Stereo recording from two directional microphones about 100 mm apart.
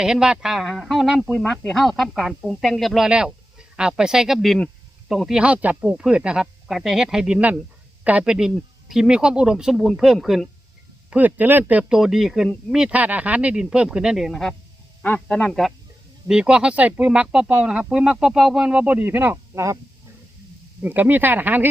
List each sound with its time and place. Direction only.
0.0 s speech: 5° right (ahead or behind)
11.1 s speech: 15° right (ahead or behind); by 14.5 s centre (ahead or behind)
15.0 s speech: 15° left (ahead or behind)
16.2 s speech: 10° right (ahead or behind); by 19.8 s 30° right (ahead or behind)
20.8 s speech: 20° right (ahead or behind)